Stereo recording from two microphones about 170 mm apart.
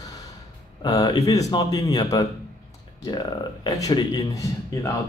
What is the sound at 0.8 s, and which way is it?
Speech, 25° left (ahead or behind).